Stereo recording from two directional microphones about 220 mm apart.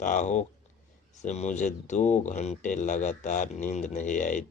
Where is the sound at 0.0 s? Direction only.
35° left (ahead or behind).